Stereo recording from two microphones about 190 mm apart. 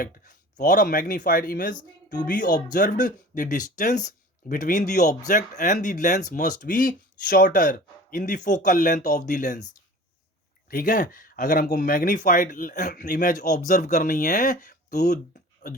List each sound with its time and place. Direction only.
0.0 s speech: 45° left (ahead or behind)
10.7 s speech: 45° left (ahead or behind)